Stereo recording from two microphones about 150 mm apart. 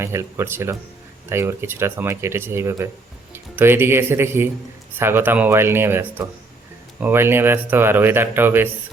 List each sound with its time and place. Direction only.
0.0 s speech: 15° right (ahead or behind)